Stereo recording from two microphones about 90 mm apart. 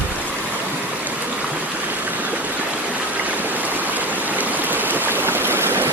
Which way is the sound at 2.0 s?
20° right (ahead or behind).